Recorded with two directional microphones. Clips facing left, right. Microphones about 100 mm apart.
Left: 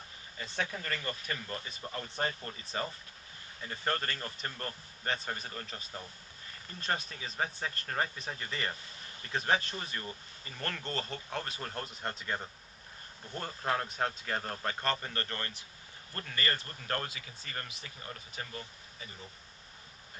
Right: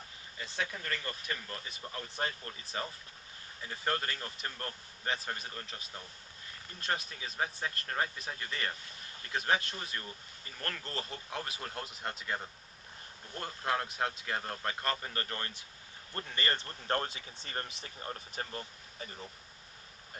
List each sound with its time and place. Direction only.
0.4 s speech: centre (ahead or behind); by 19.0 s 35° right (ahead or behind)